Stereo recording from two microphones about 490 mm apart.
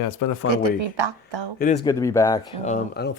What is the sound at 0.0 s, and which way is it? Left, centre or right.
Speech, left.